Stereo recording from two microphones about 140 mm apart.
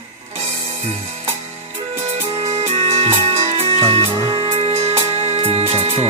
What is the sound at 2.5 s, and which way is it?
Music, 50° right (ahead or behind).